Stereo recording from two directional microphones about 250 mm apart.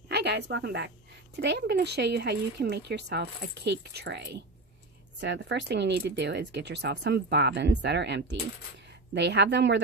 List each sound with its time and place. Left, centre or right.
0.1 s a woman's voice: right